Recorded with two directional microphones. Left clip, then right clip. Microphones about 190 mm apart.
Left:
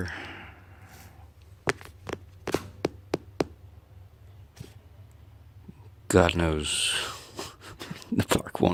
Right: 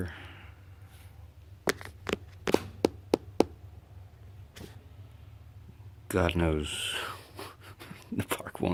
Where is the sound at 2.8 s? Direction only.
15° right (ahead or behind).